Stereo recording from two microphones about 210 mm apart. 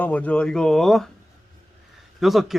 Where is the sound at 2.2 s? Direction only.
Centre (ahead or behind).